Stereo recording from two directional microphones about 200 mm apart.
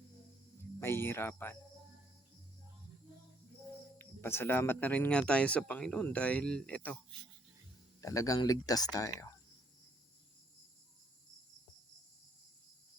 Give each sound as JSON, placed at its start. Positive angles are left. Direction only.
{"t": 0.8, "sound": "speech", "side_deg": 10}
{"t": 3.9, "sound": "speech", "side_deg": 10}
{"t": 8.0, "sound": "speech", "side_deg": 15}